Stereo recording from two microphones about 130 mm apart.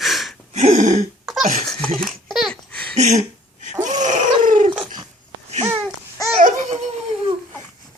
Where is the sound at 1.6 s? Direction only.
5° left (ahead or behind).